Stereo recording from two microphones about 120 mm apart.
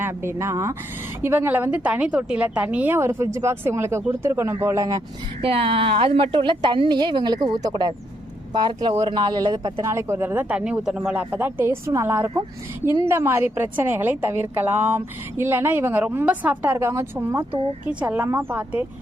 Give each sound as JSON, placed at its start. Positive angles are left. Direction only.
{"t": 0.0, "sound": "a woman's voice", "side_deg": -20}
{"t": 5.4, "sound": "a woman's voice", "side_deg": -50}
{"t": 9.8, "sound": "a woman's voice", "side_deg": -25}